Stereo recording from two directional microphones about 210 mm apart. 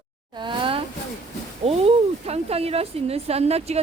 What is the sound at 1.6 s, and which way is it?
Speech, 30° right (ahead or behind).